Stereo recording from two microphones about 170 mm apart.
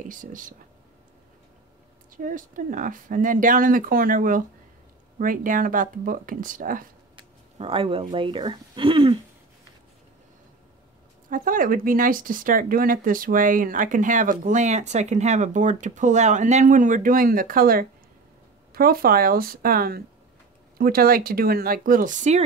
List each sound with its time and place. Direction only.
0.1 s speech: 50° right (ahead or behind)
2.1 s speech: 50° right (ahead or behind)
7.2 s speech: 30° right (ahead or behind)
11.2 s speech: 55° right (ahead or behind)